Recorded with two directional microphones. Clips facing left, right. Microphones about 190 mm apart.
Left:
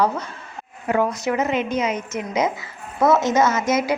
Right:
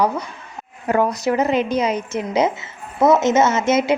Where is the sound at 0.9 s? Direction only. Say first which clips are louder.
Right 2 dB; 40° right (ahead or behind).